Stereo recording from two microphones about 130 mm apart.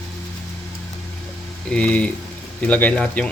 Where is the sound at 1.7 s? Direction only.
10° left (ahead or behind).